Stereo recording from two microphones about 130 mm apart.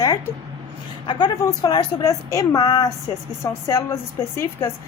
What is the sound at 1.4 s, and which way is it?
A woman's voice, 30° left (ahead or behind).